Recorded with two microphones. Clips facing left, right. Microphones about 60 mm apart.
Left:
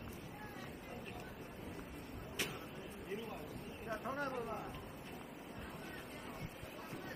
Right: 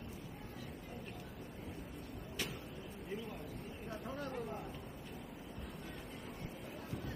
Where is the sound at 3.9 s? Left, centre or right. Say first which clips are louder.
Left 3 dB; left.